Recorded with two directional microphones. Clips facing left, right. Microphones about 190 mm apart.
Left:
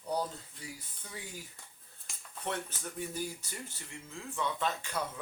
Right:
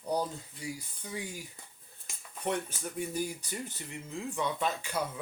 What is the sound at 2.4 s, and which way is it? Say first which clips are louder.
Speech: right 5 dB; 15° right (ahead or behind).